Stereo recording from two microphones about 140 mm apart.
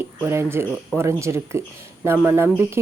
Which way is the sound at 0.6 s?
15° right (ahead or behind).